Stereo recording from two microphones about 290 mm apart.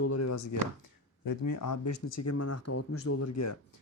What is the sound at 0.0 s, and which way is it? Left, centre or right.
Speech, left.